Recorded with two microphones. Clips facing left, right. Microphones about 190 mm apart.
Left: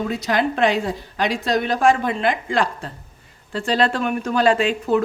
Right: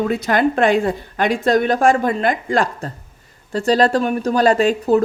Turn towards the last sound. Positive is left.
turn(degrees=-40)  # may be behind; listen again after turning